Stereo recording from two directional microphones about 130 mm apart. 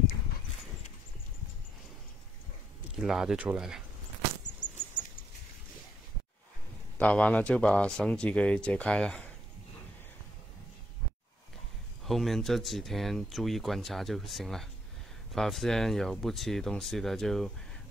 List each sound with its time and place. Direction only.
3.0 s speech: 5° right (ahead or behind)
4.4 s a sound: 70° left (ahead or behind)
7.0 s speech: 10° left (ahead or behind)
12.0 s speech: centre (ahead or behind)